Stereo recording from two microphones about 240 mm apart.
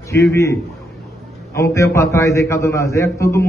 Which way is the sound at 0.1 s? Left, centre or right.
Centre.